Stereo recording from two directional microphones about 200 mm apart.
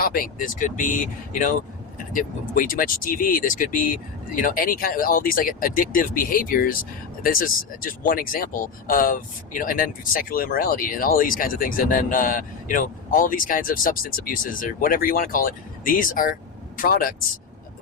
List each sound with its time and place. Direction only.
0.0 s speech: 45° left (ahead or behind)